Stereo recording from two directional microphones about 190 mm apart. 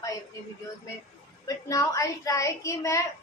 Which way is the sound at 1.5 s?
20° left (ahead or behind).